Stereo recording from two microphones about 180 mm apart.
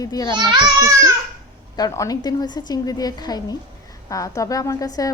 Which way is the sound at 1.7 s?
20° left (ahead or behind).